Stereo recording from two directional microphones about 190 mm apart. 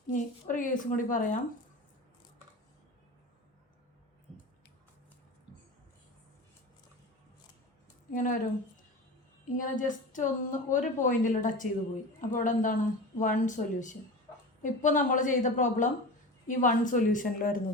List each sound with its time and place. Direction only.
0.1 s a woman's voice: 45° left (ahead or behind)
4.3 s squish: 5° left (ahead or behind)
8.1 s a woman's voice: 45° left (ahead or behind)
9.6 s a woman's voice: 45° left (ahead or behind)